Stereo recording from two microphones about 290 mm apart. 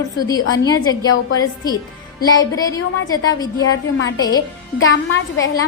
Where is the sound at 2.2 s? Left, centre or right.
Centre.